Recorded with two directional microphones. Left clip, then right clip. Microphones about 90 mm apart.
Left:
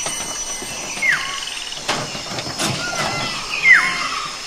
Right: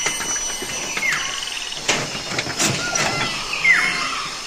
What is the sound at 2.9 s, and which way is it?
Vehicle, centre (ahead or behind).